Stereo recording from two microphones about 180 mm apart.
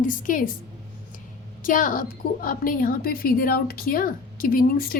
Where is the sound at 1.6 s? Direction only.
50° left (ahead or behind).